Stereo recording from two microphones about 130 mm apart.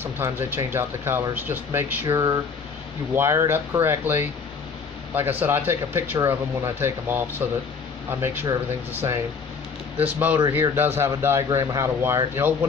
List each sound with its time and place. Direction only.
0.0 s speech: 20° right (ahead or behind)
2.1 s speech: 25° right (ahead or behind)
8.9 s speech: 20° right (ahead or behind)